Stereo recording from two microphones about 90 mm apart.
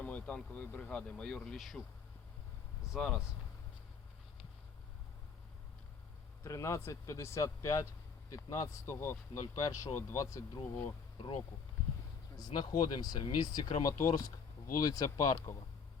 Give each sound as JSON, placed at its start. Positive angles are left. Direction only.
{"t": 0.0, "sound": "vehicle", "side_deg": 15}
{"t": 0.5, "sound": "speech", "side_deg": 15}
{"t": 2.9, "sound": "speech", "side_deg": 5}
{"t": 6.4, "sound": "speech", "side_deg": 35}
{"t": 12.4, "sound": "speech", "side_deg": 50}